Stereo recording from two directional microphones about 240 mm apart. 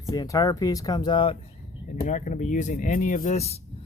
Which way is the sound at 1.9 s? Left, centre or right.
Left.